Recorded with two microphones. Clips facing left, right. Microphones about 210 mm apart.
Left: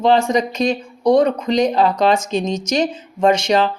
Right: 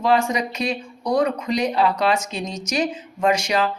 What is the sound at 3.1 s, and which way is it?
Speech, 30° left (ahead or behind).